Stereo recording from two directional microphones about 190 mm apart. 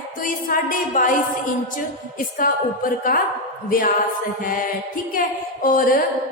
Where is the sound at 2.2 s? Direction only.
50° left (ahead or behind).